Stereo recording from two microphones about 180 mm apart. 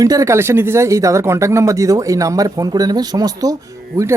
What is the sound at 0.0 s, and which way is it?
Speech, 20° right (ahead or behind).